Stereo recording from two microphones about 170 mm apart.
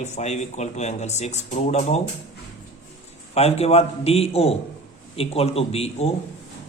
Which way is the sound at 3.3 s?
35° left (ahead or behind).